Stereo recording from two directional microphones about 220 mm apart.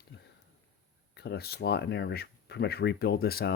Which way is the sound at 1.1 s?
50° left (ahead or behind).